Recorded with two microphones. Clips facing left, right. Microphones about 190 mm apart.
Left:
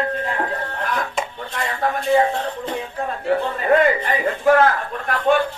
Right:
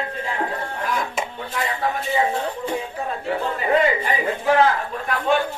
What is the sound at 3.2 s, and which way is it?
A man's voice, 55° left (ahead or behind).